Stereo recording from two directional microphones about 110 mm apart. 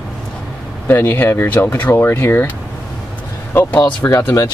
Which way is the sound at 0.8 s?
20° left (ahead or behind).